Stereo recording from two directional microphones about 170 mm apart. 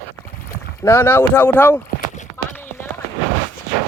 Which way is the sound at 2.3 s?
15° left (ahead or behind).